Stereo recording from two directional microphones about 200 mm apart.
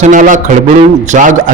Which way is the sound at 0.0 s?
40° right (ahead or behind).